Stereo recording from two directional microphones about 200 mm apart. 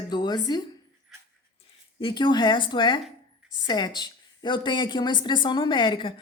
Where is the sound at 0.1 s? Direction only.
20° left (ahead or behind).